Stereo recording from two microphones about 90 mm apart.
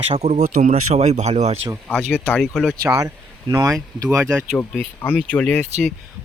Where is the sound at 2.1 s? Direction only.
20° left (ahead or behind).